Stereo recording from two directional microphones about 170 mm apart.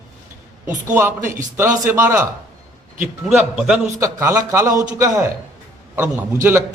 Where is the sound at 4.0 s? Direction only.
20° right (ahead or behind).